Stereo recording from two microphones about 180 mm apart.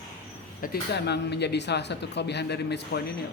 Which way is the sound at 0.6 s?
65° left (ahead or behind).